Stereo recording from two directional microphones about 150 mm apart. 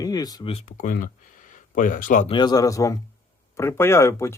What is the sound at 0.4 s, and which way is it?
Speech, 40° left (ahead or behind).